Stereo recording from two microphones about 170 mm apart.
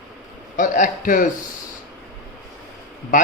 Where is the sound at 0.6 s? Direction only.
50° left (ahead or behind).